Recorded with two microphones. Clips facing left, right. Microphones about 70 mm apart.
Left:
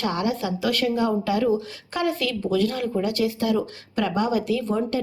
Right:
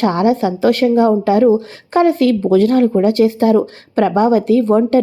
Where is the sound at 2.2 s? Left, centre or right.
Right.